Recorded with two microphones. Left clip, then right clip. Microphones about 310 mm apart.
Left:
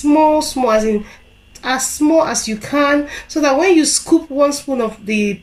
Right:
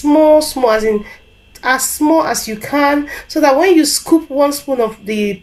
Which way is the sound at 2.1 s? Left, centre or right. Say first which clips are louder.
Even; right.